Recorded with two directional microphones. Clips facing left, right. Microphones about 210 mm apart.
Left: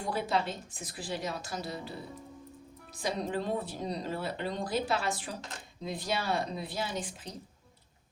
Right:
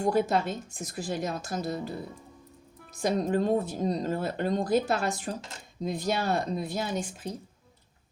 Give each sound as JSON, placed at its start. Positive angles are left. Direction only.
{"t": 0.0, "sound": "a woman's voice", "side_deg": -45}
{"t": 2.9, "sound": "a woman's voice", "side_deg": -45}